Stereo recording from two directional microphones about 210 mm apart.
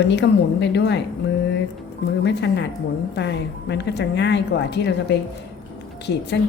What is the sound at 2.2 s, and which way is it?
Speech, 55° left (ahead or behind).